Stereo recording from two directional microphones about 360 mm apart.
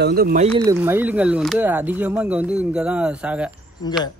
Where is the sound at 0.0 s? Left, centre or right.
Right.